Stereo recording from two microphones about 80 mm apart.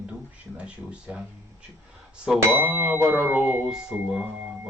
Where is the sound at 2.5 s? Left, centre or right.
Right.